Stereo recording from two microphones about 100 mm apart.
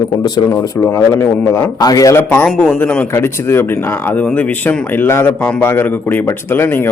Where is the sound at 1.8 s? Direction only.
40° left (ahead or behind).